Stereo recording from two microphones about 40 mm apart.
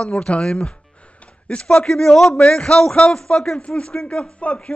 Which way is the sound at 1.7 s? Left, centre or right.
Centre.